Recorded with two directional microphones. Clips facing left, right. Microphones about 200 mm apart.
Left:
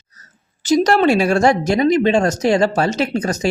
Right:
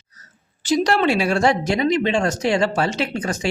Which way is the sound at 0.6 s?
45° left (ahead or behind).